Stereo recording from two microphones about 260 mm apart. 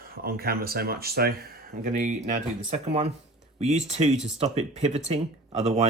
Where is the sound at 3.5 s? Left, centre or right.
Right.